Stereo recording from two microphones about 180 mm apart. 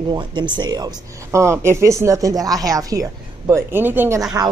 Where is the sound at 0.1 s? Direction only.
25° right (ahead or behind).